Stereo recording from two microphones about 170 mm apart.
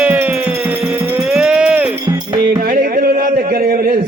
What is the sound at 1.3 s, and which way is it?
Music, 5° right (ahead or behind).